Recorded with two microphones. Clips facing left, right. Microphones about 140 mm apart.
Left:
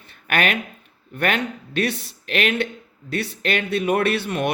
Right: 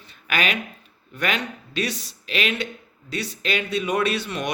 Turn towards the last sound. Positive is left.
turn(degrees=55)  # may be behind; listen again after turning